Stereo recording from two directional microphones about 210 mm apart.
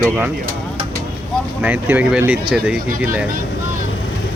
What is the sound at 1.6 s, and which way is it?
Speech, 10° right (ahead or behind).